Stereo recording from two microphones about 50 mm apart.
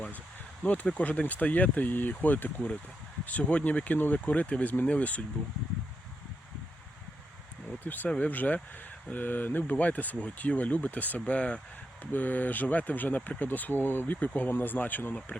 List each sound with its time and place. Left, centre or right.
0.6 s speech: left
7.9 s speech: left
12.1 s speech: left